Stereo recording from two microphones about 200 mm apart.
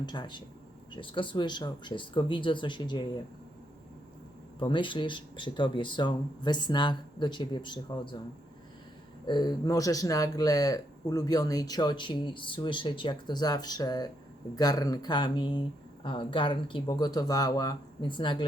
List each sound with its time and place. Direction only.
0.0 s speech: 20° left (ahead or behind)
4.6 s speech: 25° left (ahead or behind)
9.2 s speech: 20° left (ahead or behind)